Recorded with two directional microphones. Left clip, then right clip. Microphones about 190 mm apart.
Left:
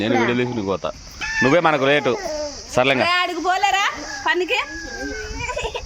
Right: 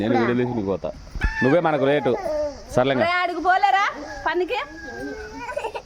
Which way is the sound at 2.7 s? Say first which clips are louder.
Left 3 dB; 15° right (ahead or behind).